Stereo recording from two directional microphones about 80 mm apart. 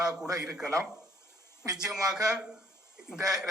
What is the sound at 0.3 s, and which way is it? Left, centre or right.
Speech, right.